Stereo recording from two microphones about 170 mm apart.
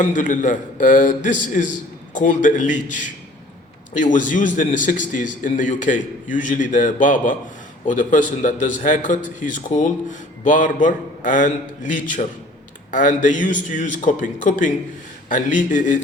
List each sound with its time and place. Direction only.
0.0 s a man's voice: 50° left (ahead or behind)
12.9 s a man's voice: 50° left (ahead or behind)